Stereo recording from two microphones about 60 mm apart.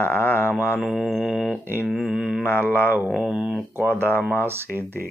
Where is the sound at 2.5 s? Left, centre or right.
Left.